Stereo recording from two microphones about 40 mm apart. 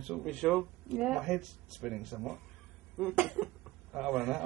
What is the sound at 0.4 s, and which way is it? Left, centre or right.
A man's voice, centre.